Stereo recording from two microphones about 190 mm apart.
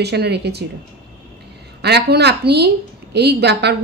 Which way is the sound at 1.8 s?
60° right (ahead or behind).